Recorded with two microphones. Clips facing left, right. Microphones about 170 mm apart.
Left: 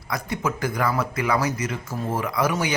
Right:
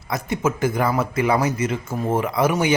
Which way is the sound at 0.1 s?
20° right (ahead or behind).